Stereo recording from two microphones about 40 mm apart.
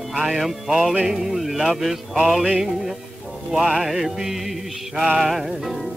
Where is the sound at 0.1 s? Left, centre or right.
Centre.